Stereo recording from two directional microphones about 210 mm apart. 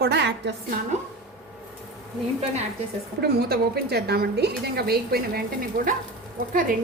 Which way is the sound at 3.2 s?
50° right (ahead or behind).